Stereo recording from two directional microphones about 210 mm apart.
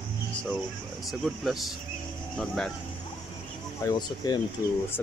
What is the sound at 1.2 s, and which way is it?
Speech, centre (ahead or behind).